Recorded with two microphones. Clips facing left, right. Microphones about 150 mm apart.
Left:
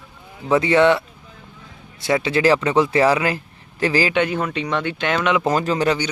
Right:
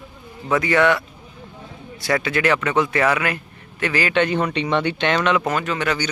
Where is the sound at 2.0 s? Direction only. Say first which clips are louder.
Left 3 dB; 25° left (ahead or behind).